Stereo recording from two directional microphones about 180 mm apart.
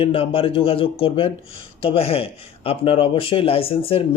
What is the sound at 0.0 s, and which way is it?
Speech, 30° left (ahead or behind).